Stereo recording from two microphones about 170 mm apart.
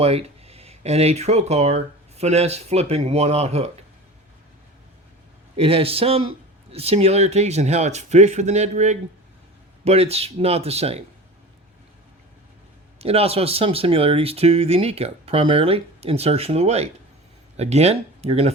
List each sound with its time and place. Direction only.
0.0 s speech: 35° right (ahead or behind)
5.5 s speech: 35° right (ahead or behind)
13.0 s speech: 35° right (ahead or behind)